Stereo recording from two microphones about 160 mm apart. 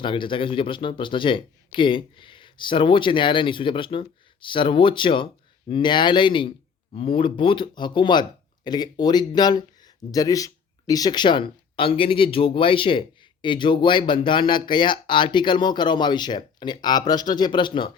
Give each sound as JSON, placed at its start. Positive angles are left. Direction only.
{"t": 0.0, "sound": "speech", "side_deg": 30}